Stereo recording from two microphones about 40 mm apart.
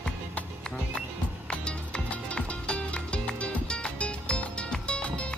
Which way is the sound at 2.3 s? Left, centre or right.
Left.